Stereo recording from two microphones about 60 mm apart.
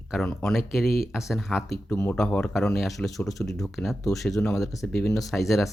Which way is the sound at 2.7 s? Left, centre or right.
Centre.